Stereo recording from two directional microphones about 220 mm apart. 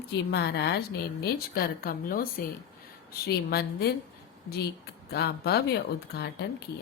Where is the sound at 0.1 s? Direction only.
50° left (ahead or behind).